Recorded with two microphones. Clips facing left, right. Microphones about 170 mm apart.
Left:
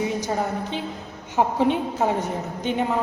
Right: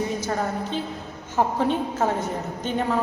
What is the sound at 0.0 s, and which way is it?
A woman's voice, 15° left (ahead or behind).